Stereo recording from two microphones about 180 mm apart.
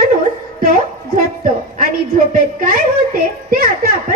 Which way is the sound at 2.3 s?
50° right (ahead or behind).